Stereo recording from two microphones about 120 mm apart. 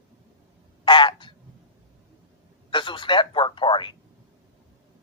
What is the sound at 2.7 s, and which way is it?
Speech, 45° left (ahead or behind).